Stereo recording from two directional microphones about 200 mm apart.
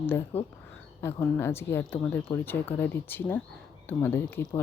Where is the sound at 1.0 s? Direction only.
15° left (ahead or behind).